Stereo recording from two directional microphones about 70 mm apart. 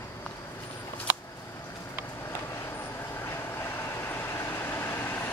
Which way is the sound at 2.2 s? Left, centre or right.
Left.